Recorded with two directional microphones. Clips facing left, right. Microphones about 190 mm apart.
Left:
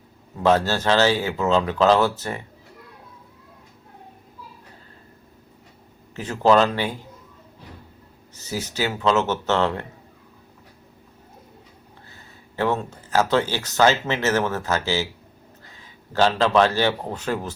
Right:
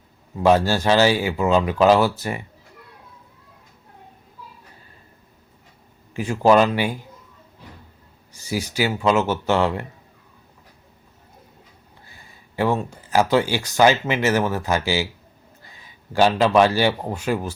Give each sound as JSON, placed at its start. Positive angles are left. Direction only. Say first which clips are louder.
{"t": 0.4, "sound": "a man's voice", "louder": "right 2 dB", "side_deg": -10}
{"t": 6.1, "sound": "a man's voice", "louder": "right 2 dB", "side_deg": -10}
{"t": 8.3, "sound": "a man's voice", "louder": "right 3 dB", "side_deg": -10}
{"t": 12.0, "sound": "a man's voice", "louder": "left 2 dB", "side_deg": -10}